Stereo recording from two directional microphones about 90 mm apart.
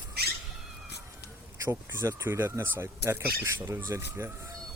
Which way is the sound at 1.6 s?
30° right (ahead or behind).